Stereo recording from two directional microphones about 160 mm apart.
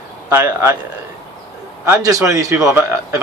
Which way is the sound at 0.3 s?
15° right (ahead or behind).